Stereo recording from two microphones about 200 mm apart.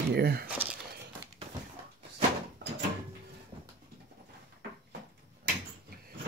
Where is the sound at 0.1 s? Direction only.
50° right (ahead or behind).